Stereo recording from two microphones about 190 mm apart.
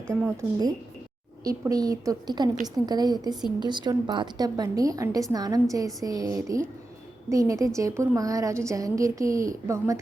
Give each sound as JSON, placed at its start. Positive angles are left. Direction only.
{"t": 0.1, "sound": "a woman's voice", "side_deg": -15}